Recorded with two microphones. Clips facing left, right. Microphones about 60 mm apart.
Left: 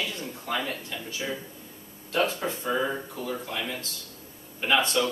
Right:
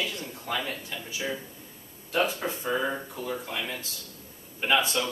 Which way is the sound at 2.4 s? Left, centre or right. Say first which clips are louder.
Left 1 dB; centre.